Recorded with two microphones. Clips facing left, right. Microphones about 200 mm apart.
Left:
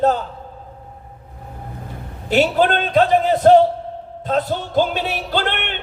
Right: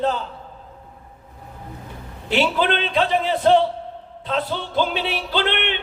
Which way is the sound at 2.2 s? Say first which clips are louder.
Left 4 dB; 45° left (ahead or behind).